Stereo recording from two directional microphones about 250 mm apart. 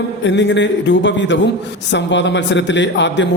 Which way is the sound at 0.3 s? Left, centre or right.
Left.